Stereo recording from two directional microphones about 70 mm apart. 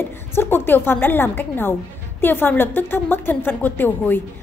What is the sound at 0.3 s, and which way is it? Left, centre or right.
A woman's voice, left.